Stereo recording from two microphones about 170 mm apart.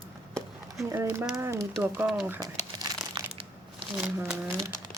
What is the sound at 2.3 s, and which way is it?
Crumpling, 25° right (ahead or behind).